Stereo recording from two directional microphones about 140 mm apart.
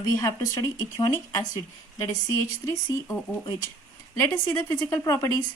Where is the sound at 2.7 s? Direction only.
20° left (ahead or behind).